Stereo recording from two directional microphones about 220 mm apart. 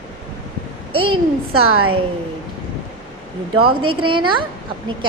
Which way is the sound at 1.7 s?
75° right (ahead or behind).